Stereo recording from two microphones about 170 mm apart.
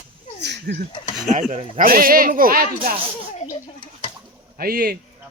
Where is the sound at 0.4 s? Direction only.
80° right.